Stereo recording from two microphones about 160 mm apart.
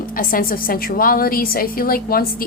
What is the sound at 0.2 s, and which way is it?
A woman's voice, 65° left (ahead or behind).